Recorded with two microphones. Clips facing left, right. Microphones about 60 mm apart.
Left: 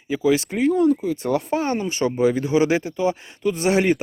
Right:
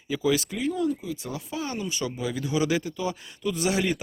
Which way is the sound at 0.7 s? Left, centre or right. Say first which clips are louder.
Left 9 dB; left.